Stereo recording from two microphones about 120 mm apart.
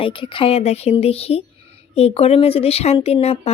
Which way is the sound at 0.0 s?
45° left (ahead or behind).